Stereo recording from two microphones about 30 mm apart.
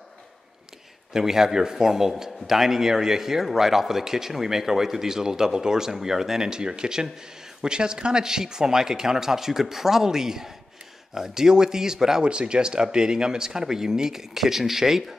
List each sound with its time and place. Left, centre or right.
1.1 s speech: centre
12.2 s speech: right
14.3 s speech: centre